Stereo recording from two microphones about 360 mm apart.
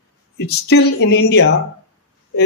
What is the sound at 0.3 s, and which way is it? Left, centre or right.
Speech, left.